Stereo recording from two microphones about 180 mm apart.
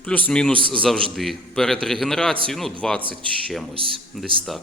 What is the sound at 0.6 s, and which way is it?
Speech, 30° right (ahead or behind).